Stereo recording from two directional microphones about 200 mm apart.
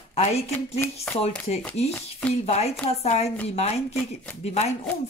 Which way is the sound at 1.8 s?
30° left (ahead or behind).